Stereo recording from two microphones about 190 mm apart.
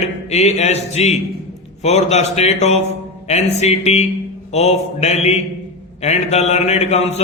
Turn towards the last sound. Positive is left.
turn(degrees=35)  # may be behind; listen again after turning